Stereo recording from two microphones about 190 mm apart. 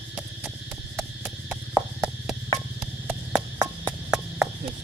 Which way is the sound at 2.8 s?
5° right (ahead or behind).